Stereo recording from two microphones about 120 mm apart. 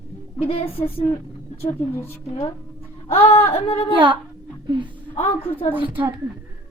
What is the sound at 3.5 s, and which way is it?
Speech, 55° left (ahead or behind).